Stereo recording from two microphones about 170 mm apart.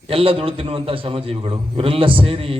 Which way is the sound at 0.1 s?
35° right (ahead or behind).